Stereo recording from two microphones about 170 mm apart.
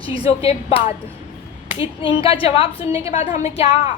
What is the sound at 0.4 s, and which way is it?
Speech, 35° left (ahead or behind).